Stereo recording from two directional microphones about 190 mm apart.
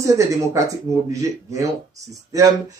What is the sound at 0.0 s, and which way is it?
Speech, 15° right (ahead or behind).